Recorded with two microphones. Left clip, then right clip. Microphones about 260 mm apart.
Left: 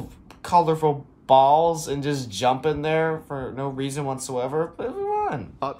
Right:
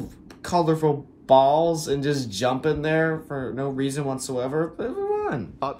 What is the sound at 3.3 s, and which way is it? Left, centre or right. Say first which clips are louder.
Speech: right 1 dB; centre.